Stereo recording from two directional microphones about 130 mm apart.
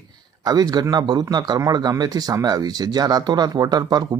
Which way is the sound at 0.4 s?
30° right (ahead or behind).